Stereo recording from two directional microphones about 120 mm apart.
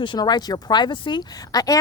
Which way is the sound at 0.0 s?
40° left (ahead or behind).